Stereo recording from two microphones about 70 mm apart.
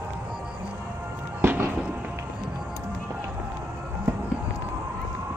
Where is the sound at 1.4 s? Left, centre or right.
Right.